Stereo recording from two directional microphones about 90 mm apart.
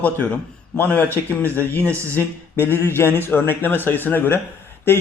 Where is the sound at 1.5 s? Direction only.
20° left (ahead or behind).